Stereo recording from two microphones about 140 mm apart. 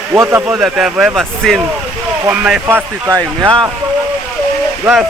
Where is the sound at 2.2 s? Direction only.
10° right (ahead or behind).